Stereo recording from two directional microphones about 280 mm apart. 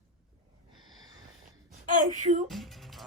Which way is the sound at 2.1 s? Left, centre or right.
Right.